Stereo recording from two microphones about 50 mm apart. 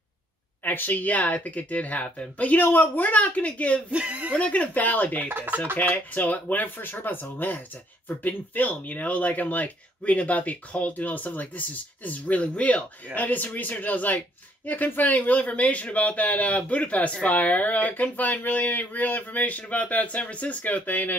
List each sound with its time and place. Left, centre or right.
0.7 s speech: left
3.9 s speech: right
4.3 s speech: left
5.3 s speech: right
5.8 s speech: left